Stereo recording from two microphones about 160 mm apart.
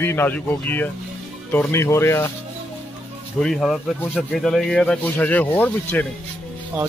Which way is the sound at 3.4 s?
Centre (ahead or behind).